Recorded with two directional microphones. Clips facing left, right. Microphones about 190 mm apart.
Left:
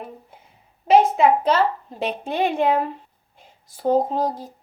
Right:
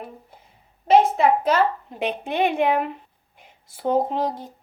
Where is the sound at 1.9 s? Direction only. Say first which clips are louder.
Even; 15° right (ahead or behind).